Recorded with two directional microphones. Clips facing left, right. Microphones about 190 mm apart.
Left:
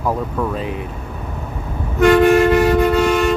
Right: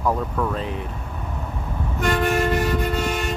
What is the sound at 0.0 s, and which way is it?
Speech, 5° left (ahead or behind).